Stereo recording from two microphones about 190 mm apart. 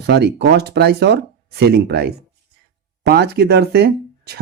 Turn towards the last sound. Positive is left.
turn(degrees=-55)  # may be behind; listen again after turning